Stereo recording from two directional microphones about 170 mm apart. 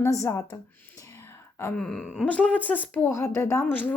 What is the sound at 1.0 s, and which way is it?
Whispering, 15° left (ahead or behind).